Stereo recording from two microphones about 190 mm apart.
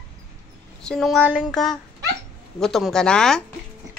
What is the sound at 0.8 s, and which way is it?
Speech, 5° left (ahead or behind).